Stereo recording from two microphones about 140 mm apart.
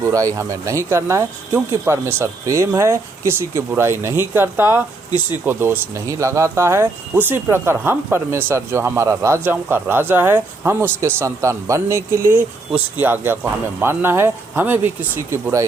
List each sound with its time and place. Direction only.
0.0 s speech: 25° right (ahead or behind)